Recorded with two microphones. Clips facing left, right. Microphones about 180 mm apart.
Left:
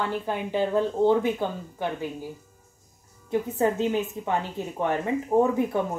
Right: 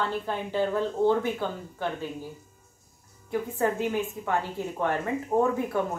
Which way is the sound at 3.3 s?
25° left (ahead or behind).